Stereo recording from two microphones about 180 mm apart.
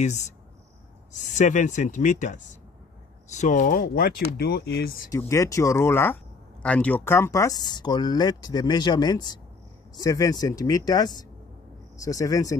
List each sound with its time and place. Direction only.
0.0 s speech: 40° left (ahead or behind)
1.3 s speech: 45° left (ahead or behind)
5.1 s speech: 15° left (ahead or behind)